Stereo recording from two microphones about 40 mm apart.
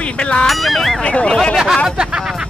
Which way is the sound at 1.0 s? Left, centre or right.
Left.